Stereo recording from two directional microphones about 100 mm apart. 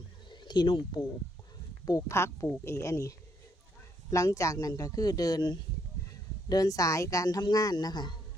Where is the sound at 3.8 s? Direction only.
30° left (ahead or behind).